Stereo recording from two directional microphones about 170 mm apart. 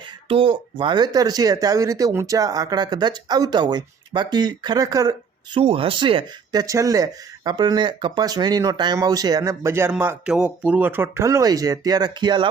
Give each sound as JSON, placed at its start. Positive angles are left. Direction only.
{"t": 0.3, "sound": "speech", "side_deg": -30}
{"t": 5.5, "sound": "speech", "side_deg": -35}